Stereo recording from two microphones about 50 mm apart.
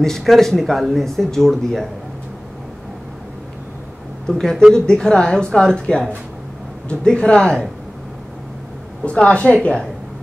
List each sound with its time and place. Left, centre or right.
0.0 s speech: centre
4.3 s a woman's voice: centre
9.0 s a woman's voice: left